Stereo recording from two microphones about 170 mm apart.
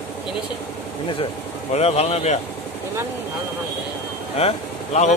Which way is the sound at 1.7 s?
40° left (ahead or behind).